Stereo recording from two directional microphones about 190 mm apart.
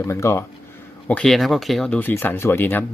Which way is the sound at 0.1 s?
15° left (ahead or behind).